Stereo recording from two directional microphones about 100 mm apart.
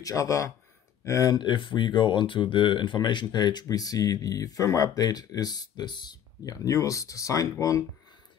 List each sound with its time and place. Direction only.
0.0 s speech: 35° left (ahead or behind)
1.4 s speech: 55° left (ahead or behind); by 7.8 s 30° left (ahead or behind)